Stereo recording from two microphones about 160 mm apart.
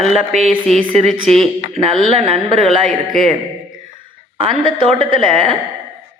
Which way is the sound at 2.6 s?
Centre (ahead or behind).